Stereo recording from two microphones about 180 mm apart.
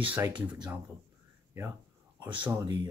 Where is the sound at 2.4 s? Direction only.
15° right (ahead or behind).